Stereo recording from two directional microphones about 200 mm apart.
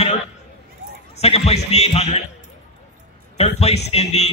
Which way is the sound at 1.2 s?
30° left (ahead or behind).